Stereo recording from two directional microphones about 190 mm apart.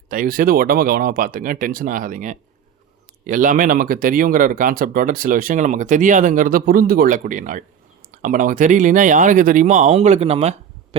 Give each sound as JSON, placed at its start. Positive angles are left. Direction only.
{"t": 0.1, "sound": "speech", "side_deg": -45}